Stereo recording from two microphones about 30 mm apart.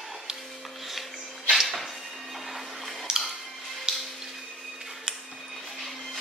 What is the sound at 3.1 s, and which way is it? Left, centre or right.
Music, right.